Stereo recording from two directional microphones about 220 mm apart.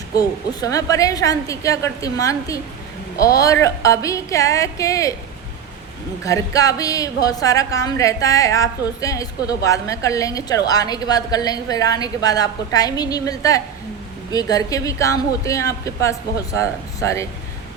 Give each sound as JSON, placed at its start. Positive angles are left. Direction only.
{"t": 0.2, "sound": "a woman's voice", "side_deg": 15}
{"t": 6.2, "sound": "a woman's voice", "side_deg": 15}